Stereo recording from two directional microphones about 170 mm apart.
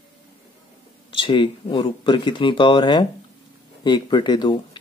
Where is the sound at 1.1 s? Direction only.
30° left (ahead or behind).